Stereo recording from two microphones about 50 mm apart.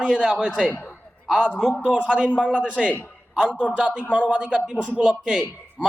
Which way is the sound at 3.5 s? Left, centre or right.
Left.